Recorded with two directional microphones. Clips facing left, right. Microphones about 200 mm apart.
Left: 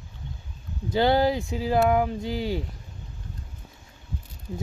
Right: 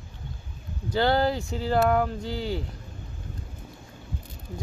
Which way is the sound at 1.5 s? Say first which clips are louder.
Even; 5° left (ahead or behind).